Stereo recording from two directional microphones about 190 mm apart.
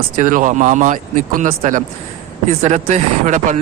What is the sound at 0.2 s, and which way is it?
A man's voice, 45° right (ahead or behind).